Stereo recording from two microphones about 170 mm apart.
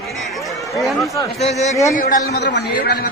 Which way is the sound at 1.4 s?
40° left (ahead or behind).